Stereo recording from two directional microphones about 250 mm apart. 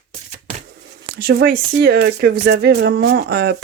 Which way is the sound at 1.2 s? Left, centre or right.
Right.